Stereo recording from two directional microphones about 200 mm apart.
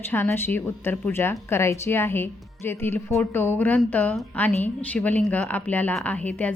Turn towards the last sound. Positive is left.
turn(degrees=5)  # may be behind; listen again after turning